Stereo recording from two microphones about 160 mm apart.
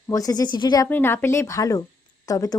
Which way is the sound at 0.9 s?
15° left (ahead or behind).